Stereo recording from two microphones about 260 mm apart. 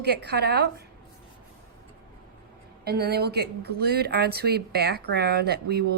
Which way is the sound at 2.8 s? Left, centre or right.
Right.